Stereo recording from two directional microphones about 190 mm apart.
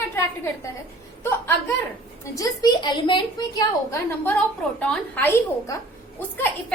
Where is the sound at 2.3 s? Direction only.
20° left (ahead or behind).